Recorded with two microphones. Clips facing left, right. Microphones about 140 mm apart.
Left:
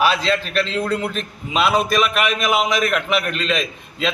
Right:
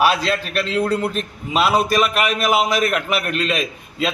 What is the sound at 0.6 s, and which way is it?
A man's voice, 5° right (ahead or behind).